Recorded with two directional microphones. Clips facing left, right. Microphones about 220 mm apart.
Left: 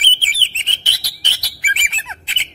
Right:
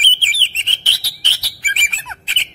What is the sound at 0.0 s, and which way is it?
Bird, 15° left (ahead or behind).